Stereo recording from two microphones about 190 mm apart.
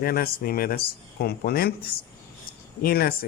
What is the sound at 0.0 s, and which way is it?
Speech, 50° left (ahead or behind).